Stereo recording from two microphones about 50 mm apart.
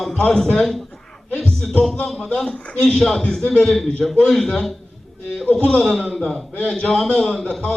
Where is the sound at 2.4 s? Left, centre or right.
Left.